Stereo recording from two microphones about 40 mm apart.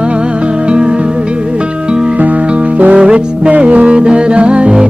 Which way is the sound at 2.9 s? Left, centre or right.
Right.